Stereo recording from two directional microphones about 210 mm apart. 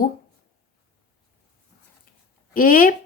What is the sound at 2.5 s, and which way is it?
Speech, 40° left (ahead or behind).